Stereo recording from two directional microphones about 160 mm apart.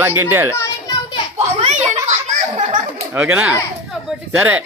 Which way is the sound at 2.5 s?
50° right (ahead or behind).